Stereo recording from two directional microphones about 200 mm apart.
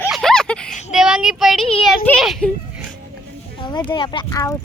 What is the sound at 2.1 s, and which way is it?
Speech, 5° left (ahead or behind).